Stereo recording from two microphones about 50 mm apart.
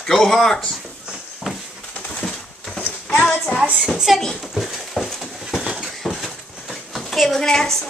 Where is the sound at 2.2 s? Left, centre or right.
Centre.